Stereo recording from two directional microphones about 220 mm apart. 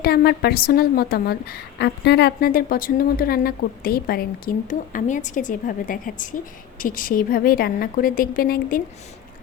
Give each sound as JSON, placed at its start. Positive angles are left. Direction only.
{"t": 0.0, "sound": "a woman's voice", "side_deg": 45}